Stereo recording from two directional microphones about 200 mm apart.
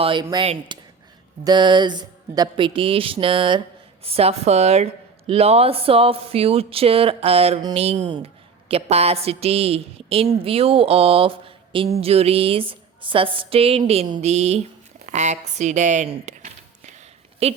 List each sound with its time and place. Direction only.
0.0 s a woman's voice: 25° right (ahead or behind)